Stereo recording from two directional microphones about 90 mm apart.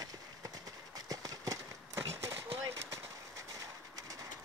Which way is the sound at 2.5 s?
35° right (ahead or behind).